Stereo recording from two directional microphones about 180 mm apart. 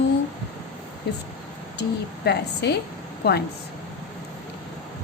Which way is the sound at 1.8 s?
70° left (ahead or behind).